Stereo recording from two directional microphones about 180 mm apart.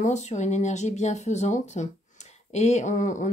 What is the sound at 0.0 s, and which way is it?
Speech, 40° left (ahead or behind).